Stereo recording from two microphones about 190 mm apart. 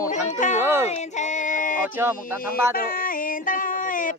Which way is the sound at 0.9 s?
35° left (ahead or behind).